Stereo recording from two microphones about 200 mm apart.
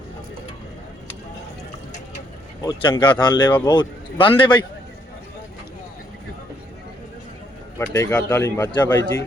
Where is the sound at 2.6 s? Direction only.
25° left (ahead or behind).